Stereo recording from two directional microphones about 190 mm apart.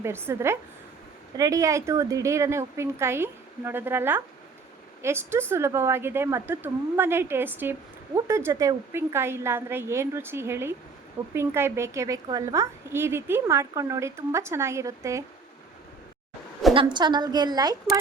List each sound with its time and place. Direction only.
0.0 s speech: 15° right (ahead or behind)
16.7 s a woman's voice: 25° right (ahead or behind)